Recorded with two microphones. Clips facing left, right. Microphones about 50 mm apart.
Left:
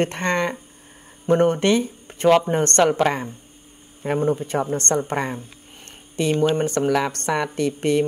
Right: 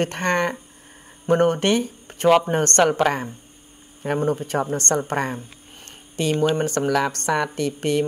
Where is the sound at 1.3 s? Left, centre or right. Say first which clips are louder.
Left 1 dB; right.